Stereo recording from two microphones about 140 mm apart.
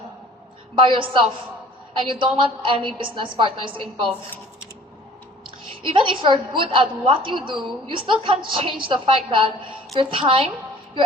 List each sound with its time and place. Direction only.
0.8 s a woman's voice: 40° right (ahead or behind)
5.8 s a woman's voice: 35° right (ahead or behind)